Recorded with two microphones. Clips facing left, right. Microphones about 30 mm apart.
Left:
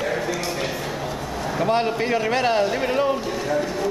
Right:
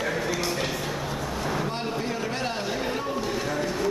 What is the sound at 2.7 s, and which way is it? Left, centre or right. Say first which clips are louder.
Speech: left 7 dB; left.